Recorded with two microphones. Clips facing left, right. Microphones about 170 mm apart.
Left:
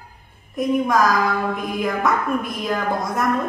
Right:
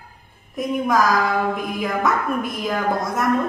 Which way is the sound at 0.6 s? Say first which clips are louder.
Left 1 dB; centre (ahead or behind).